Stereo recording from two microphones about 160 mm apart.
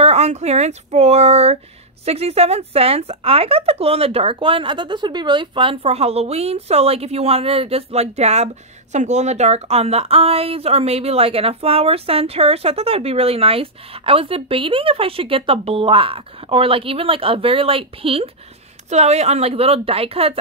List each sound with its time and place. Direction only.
0.0 s a woman's voice: 40° right (ahead or behind)